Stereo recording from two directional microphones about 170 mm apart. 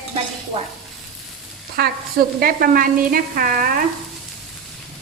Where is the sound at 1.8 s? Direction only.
65° right (ahead or behind).